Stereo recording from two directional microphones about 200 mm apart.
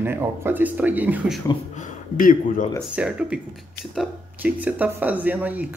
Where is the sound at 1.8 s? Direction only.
40° left (ahead or behind).